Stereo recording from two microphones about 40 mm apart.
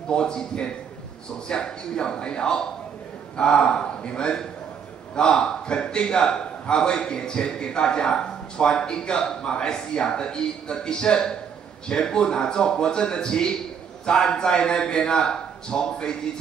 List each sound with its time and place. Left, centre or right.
0.1 s a man's voice: left